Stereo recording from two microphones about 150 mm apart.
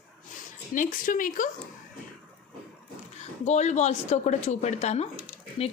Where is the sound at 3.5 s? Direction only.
50° left (ahead or behind).